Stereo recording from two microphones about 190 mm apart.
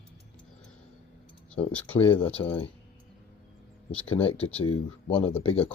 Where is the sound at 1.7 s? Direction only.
10° left (ahead or behind).